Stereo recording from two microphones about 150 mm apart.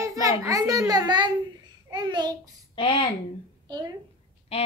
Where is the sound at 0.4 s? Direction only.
25° right (ahead or behind).